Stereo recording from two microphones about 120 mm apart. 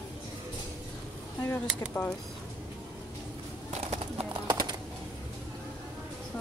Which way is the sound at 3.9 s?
60° right (ahead or behind).